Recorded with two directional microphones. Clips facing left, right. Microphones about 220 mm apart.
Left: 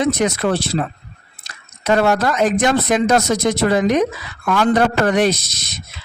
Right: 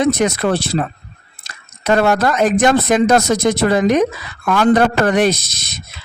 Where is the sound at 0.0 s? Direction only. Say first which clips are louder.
Right 2 dB; 50° right (ahead or behind).